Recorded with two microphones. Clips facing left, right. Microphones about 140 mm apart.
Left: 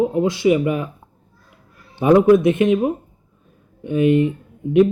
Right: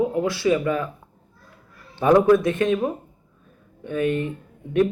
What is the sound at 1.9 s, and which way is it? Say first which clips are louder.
Speech: left 3 dB; 15° left (ahead or behind).